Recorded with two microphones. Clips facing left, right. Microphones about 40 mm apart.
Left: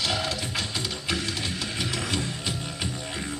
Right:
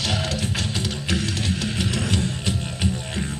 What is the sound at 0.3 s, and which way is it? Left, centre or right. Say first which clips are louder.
Music: right 3 dB; centre.